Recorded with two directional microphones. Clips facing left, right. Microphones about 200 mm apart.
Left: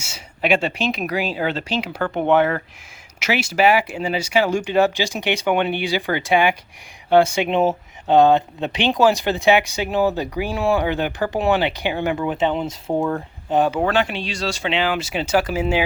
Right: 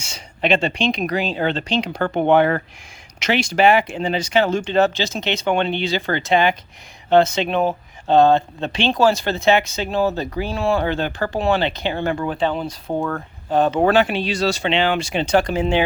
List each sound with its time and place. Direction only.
0.0 s speech: 10° left (ahead or behind)
3.2 s speech: 5° left (ahead or behind)
7.5 s speech: 25° left (ahead or behind)
8.0 s speech: 15° left (ahead or behind)
14.1 s speech: 5° right (ahead or behind)